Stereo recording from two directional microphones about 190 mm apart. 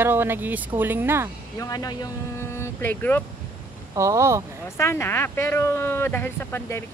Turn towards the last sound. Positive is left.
turn(degrees=10)  # may be behind; listen again after turning